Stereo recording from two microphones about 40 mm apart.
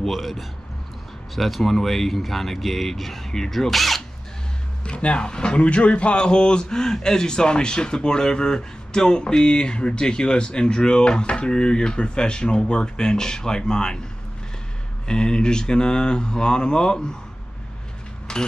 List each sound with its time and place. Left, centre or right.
0.0 s speech: centre
4.8 s speech: left
15.0 s speech: left
18.3 s a sound: centre